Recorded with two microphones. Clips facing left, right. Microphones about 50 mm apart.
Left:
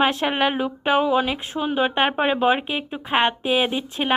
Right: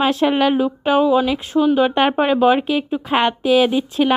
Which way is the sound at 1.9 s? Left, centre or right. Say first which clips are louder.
Right 4 dB; centre.